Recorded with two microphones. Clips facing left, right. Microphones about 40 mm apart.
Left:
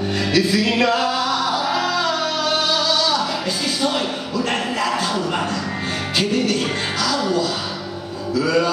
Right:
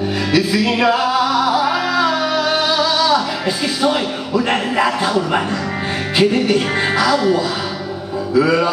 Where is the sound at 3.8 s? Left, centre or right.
Centre.